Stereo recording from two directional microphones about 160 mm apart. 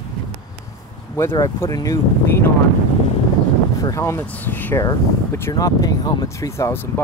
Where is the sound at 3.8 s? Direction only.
20° left (ahead or behind).